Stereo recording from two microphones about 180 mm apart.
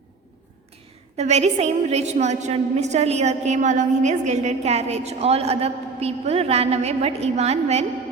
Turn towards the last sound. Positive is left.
turn(degrees=-35)  # may be behind; listen again after turning